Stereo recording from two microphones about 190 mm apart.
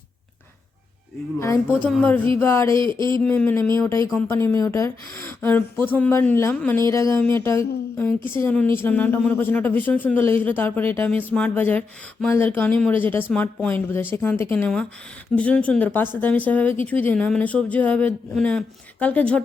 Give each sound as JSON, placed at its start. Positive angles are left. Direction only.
{"t": 1.7, "sound": "speech", "side_deg": 5}
{"t": 2.8, "sound": "speech", "side_deg": -25}
{"t": 3.1, "sound": "speech", "side_deg": 10}